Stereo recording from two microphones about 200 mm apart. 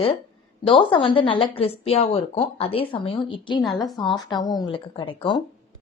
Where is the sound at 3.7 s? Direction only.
Centre (ahead or behind).